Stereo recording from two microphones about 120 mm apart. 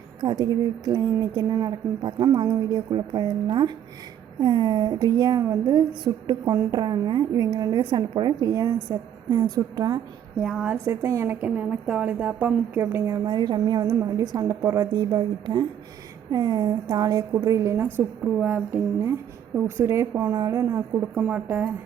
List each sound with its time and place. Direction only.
0.2 s speech: 40° right (ahead or behind)
10.4 s a woman's voice: 5° right (ahead or behind)
10.8 s speech: 30° right (ahead or behind)
11.3 s a woman's voice: 15° right (ahead or behind)
13.2 s speech: 40° right (ahead or behind); by 15.0 s 20° right (ahead or behind)
15.1 s speech: 35° right (ahead or behind)
18.3 s a woman's voice: 15° right (ahead or behind)